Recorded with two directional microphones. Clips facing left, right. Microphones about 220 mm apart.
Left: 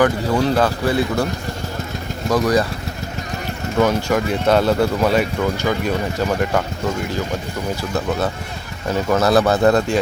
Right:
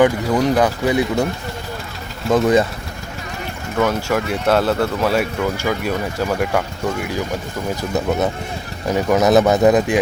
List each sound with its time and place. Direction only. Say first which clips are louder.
0.0 s speech: right 2 dB; 15° right (ahead or behind)
2.3 s speech: right 3 dB; 25° right (ahead or behind)
3.8 s speech: left 1 dB; 5° right (ahead or behind)
7.8 s speech: right 3 dB; 20° right (ahead or behind)